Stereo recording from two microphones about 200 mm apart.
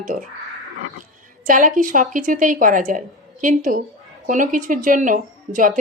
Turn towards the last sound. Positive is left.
turn(degrees=-40)  # may be behind; listen again after turning